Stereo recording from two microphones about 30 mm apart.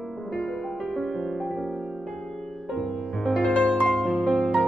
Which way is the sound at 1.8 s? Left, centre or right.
Centre.